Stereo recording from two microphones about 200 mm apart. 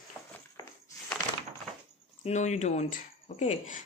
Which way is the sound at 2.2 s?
35° left (ahead or behind).